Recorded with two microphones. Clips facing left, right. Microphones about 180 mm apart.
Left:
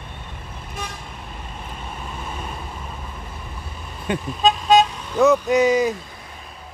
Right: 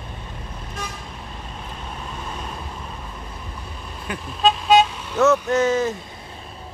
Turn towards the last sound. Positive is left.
turn(degrees=15)  # may be behind; listen again after turning